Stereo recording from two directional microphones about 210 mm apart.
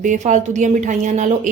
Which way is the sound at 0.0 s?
35° right (ahead or behind).